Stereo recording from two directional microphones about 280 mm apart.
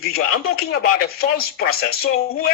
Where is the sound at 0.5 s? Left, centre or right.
Left.